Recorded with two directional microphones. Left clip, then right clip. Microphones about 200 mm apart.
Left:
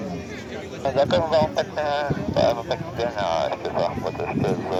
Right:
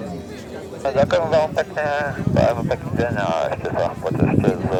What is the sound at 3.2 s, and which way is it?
Speech, 30° right (ahead or behind).